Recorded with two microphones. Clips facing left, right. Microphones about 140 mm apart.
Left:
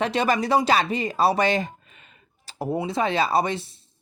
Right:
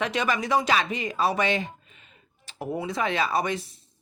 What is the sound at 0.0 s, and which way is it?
Speech, 35° left (ahead or behind).